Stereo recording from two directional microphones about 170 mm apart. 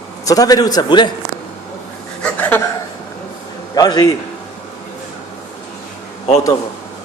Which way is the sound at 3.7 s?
25° left (ahead or behind).